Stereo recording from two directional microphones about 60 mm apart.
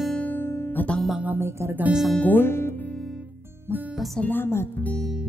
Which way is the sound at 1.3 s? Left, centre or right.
Right.